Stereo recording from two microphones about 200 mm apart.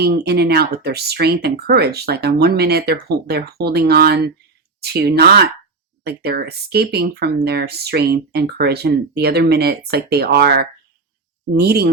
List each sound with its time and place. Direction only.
0.0 s speech: 55° right (ahead or behind)